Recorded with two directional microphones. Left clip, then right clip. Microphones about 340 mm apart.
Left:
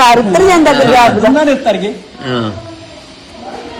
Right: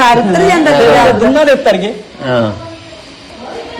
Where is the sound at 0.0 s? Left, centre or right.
Centre.